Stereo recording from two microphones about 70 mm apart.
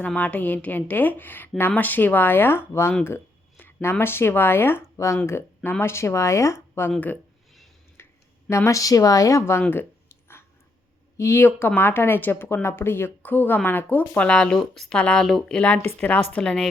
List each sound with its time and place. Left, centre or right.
0.1 s speech: centre
4.9 s speech: left
8.0 s a sound: left
8.4 s speech: left
11.2 s speech: left; by 14.9 s centre
14.9 s a woman's voice: centre
15.2 s speech: centre
15.5 s speech: centre
16.4 s a woman's voice: centre